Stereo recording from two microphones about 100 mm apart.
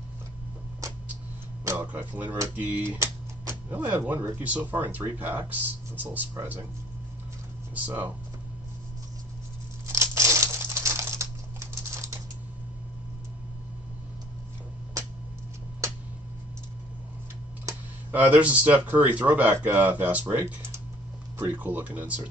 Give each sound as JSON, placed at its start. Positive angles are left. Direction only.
{"t": 1.6, "sound": "music", "side_deg": -30}
{"t": 1.9, "sound": "speech", "side_deg": -20}
{"t": 7.7, "sound": "speech", "side_deg": -15}
{"t": 9.9, "sound": "crumpling", "side_deg": -30}
{"t": 15.8, "sound": "a sound", "side_deg": -30}
{"t": 18.1, "sound": "speech", "side_deg": -15}